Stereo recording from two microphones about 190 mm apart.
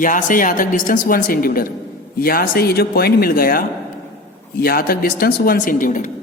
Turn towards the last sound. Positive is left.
turn(degrees=45)  # may be behind; listen again after turning